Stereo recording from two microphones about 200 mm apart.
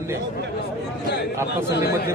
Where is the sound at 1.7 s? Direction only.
55° left (ahead or behind).